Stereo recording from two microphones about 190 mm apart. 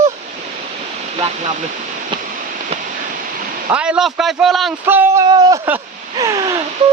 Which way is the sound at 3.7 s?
5° right (ahead or behind).